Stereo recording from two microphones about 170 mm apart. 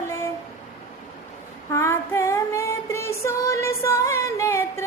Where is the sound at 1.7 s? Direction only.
15° left (ahead or behind).